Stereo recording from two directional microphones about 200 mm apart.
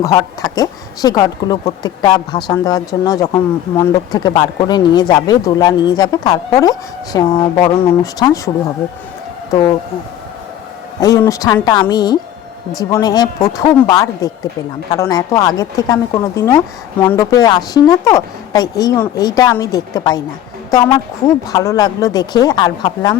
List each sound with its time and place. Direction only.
0.0 s speech: 15° left (ahead or behind)
9.5 s speech: 20° left (ahead or behind)
11.0 s speech: 15° left (ahead or behind)